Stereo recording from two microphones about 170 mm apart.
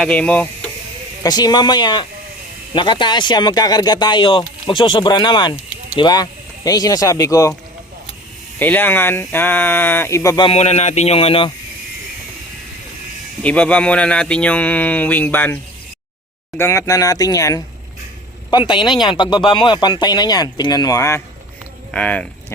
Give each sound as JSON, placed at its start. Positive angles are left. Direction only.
{"t": 0.0, "sound": "speech", "side_deg": 5}
{"t": 1.2, "sound": "speech", "side_deg": 25}
{"t": 5.5, "sound": "a sound", "side_deg": -5}
{"t": 6.0, "sound": "speech", "side_deg": 25}
{"t": 8.5, "sound": "speech", "side_deg": 10}
{"t": 13.4, "sound": "speech", "side_deg": 10}
{"t": 16.6, "sound": "speech", "side_deg": 15}
{"t": 21.9, "sound": "speech", "side_deg": 5}